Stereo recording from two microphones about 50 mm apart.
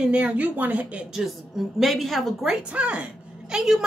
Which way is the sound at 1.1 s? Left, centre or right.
Centre.